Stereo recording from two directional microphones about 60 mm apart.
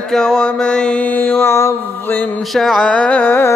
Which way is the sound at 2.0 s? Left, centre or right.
Left.